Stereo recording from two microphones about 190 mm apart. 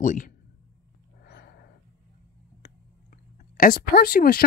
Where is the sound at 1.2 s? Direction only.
60° left (ahead or behind).